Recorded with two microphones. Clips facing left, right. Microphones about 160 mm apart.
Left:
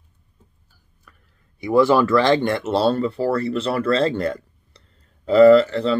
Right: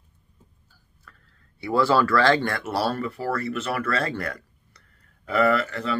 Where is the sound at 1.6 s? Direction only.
15° left (ahead or behind).